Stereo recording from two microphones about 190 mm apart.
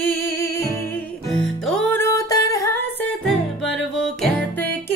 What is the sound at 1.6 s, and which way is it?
Music, 5° left (ahead or behind).